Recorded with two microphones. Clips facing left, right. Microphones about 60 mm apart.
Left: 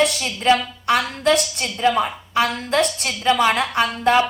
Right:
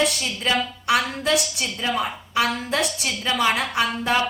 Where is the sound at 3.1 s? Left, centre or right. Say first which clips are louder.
Left 6 dB; left.